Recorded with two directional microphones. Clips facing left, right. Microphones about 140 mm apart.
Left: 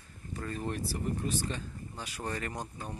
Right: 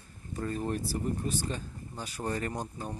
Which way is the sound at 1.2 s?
40° right (ahead or behind).